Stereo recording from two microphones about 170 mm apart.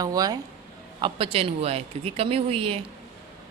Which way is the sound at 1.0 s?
35° right (ahead or behind).